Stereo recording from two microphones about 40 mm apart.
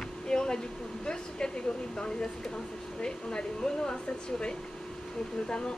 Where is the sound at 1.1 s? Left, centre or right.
Left.